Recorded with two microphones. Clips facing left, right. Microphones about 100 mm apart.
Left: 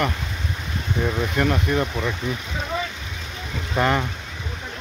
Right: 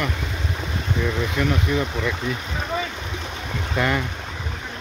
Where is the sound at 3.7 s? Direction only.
30° left (ahead or behind).